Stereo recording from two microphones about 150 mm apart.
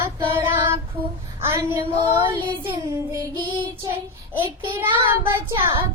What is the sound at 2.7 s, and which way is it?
Speech, 20° right (ahead or behind).